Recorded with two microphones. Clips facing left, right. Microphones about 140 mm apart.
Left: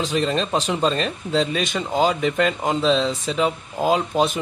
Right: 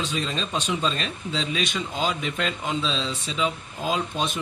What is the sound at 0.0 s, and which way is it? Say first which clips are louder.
Speech: left 7 dB; 80° left.